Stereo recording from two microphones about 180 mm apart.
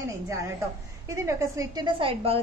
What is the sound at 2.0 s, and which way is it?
Speech, 30° right (ahead or behind).